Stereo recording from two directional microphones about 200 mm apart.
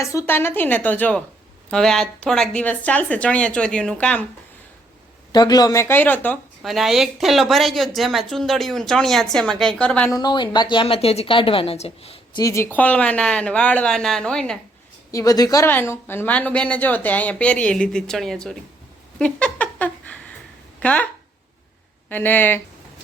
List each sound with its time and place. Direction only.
0.0 s a woman's voice: 15° left (ahead or behind)
5.3 s speech: 20° left (ahead or behind)
10.1 s a woman's voice: 20° left (ahead or behind); by 14.6 s 5° left (ahead or behind)
15.1 s a woman's voice: 15° left (ahead or behind); by 18.5 s centre (ahead or behind)
19.2 s a sound: 5° left (ahead or behind)
20.7 s speech: 5° left (ahead or behind)
22.1 s a woman's voice: 10° left (ahead or behind)